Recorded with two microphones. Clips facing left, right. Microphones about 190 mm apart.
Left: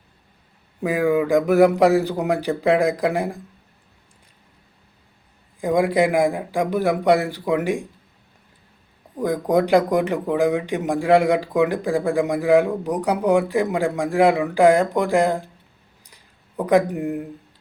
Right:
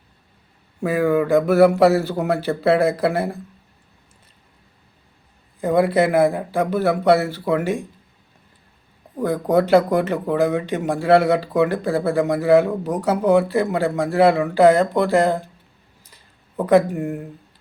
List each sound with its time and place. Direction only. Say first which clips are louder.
0.9 s speech: right 1 dB; 15° left (ahead or behind)
5.5 s speech: right 1 dB; 15° left (ahead or behind)
9.1 s speech: right 1 dB; 15° left (ahead or behind)
16.0 s a sound: right 1 dB; 15° left (ahead or behind)